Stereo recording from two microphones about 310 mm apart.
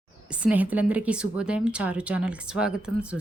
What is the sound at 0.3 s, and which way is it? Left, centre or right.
Speech, centre.